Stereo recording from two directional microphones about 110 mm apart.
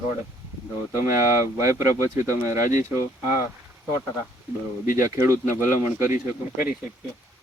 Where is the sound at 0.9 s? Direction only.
25° right (ahead or behind).